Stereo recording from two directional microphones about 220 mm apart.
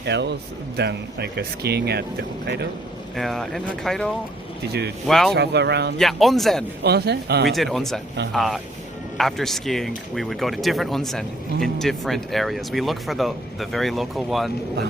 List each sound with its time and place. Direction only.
0.0 s speech: 50° right (ahead or behind)
3.2 s speech: centre (ahead or behind)
5.3 s speech: 50° right (ahead or behind)
6.0 s speech: centre (ahead or behind)
6.8 s speech: 50° right (ahead or behind)
7.4 s speech: centre (ahead or behind)